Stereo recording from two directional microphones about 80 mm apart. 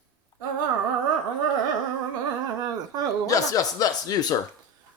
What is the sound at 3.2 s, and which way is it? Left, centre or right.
A man's voice, left.